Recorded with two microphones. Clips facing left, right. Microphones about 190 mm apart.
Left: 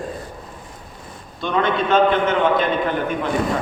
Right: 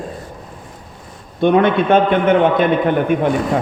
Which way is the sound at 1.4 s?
60° right (ahead or behind).